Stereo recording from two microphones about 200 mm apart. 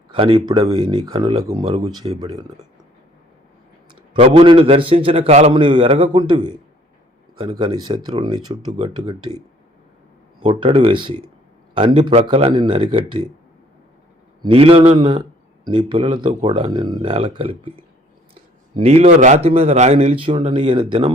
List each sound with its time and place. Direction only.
0.1 s a man's voice: 25° right (ahead or behind)
4.1 s a man's voice: 25° right (ahead or behind)
10.4 s a man's voice: 25° right (ahead or behind)
14.5 s a man's voice: 30° right (ahead or behind)
18.8 s a man's voice: 30° right (ahead or behind)